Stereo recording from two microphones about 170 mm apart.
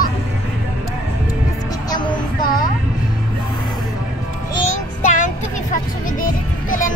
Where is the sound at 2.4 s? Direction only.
55° left (ahead or behind).